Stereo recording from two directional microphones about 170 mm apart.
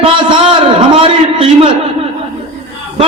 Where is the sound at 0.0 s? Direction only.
30° right (ahead or behind).